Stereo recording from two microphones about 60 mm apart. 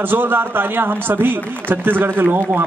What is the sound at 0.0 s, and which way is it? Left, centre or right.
A man's voice, right.